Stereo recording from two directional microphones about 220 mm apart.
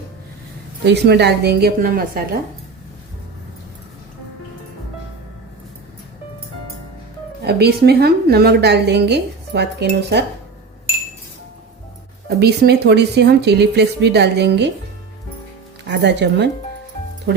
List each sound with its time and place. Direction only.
0.9 s a woman's voice: 50° right (ahead or behind)
7.4 s a woman's voice: 45° right (ahead or behind)
12.4 s a woman's voice: 50° right (ahead or behind)
15.9 s a woman's voice: 50° right (ahead or behind)